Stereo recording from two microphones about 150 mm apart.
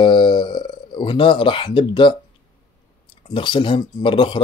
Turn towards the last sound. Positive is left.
turn(degrees=35)  # may be behind; listen again after turning